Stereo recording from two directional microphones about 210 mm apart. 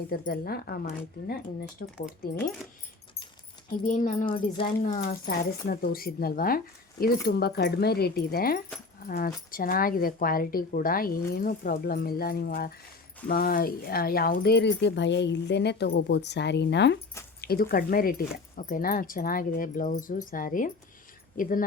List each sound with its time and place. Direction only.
0.1 s speech: 45° left (ahead or behind)
3.8 s speech: 40° left (ahead or behind)
4.5 s speech: 20° left (ahead or behind)
5.0 s speech: 45° left (ahead or behind)